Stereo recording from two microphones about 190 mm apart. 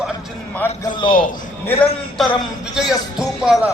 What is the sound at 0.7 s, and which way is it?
Speech, 25° left (ahead or behind).